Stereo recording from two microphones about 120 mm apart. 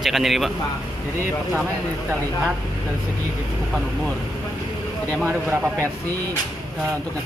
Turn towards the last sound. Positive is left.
turn(degrees=-20)  # may be behind; listen again after turning